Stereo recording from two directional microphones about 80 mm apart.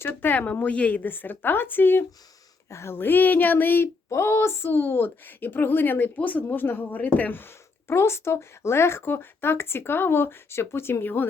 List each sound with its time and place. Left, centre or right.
0.0 s a woman's voice: left
2.6 s a woman's voice: left